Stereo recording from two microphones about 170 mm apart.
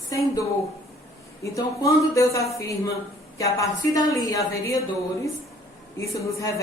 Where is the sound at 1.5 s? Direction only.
20° left (ahead or behind).